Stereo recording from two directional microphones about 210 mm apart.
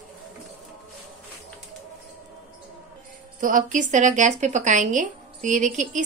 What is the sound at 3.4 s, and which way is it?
A woman's voice, 40° right (ahead or behind).